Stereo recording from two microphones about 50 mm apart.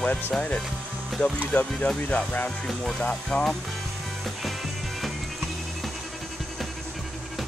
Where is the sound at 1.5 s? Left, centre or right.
Left.